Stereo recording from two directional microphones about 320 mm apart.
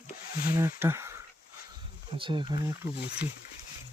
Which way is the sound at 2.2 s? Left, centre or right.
Centre.